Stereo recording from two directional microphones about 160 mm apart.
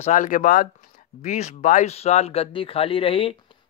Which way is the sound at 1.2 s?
45° left (ahead or behind).